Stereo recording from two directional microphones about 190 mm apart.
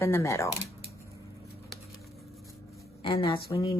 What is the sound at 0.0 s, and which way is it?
Speech, 15° left (ahead or behind).